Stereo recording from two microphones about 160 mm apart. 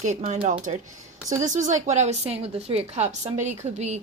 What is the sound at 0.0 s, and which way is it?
A woman's voice, 45° right (ahead or behind).